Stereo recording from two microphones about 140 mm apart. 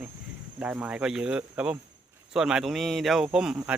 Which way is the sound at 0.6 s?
10° right (ahead or behind).